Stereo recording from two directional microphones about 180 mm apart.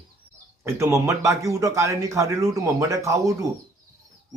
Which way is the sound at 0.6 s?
15° right (ahead or behind).